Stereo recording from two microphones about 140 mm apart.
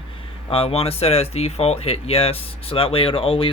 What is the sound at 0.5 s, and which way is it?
Speech, 40° left (ahead or behind).